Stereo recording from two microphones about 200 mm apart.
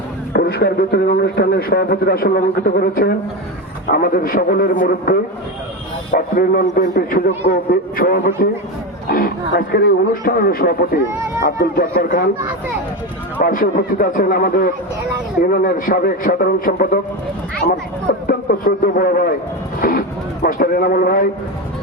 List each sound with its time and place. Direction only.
0.3 s a man's voice: 50° left (ahead or behind)
13.4 s a man's voice: 45° left (ahead or behind)
18.3 s a man's voice: 45° left (ahead or behind)